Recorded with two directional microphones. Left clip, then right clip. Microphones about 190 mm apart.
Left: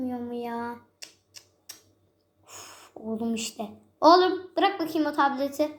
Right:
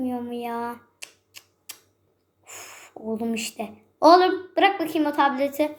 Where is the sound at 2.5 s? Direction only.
5° right (ahead or behind).